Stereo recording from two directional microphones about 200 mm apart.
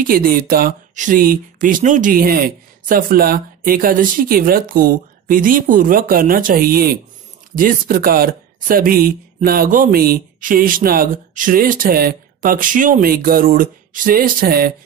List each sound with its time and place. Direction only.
0.0 s speech: 45° right (ahead or behind)